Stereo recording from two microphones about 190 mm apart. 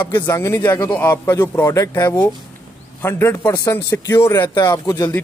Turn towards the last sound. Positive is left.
turn(degrees=15)  # may be behind; listen again after turning